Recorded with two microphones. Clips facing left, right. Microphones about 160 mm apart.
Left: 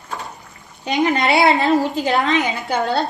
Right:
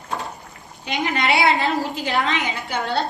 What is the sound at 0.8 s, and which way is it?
A woman's voice, 40° left (ahead or behind).